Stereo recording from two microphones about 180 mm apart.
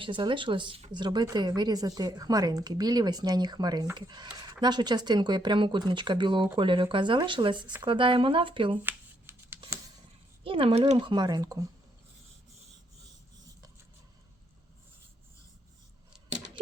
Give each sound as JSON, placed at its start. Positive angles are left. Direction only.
{"t": 0.0, "sound": "a woman's voice", "side_deg": -25}
{"t": 8.8, "sound": "a sound", "side_deg": -10}
{"t": 10.4, "sound": "a woman's voice", "side_deg": -30}